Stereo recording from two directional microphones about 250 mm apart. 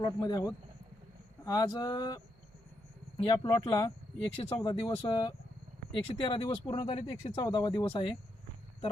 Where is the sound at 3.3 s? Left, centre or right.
Centre.